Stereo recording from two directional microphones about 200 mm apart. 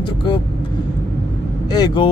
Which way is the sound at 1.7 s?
20° left (ahead or behind).